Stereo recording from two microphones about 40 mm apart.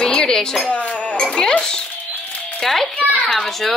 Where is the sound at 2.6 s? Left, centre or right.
Centre.